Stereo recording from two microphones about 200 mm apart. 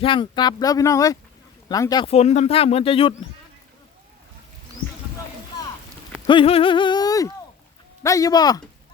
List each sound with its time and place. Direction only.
0.0 s speech: 25° left (ahead or behind)
6.2 s speech: 25° left (ahead or behind)